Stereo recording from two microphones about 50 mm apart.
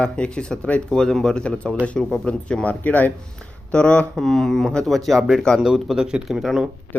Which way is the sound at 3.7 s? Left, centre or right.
Left.